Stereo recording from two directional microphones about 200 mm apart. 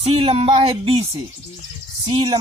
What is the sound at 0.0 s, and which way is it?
A woman's voice, 30° right (ahead or behind).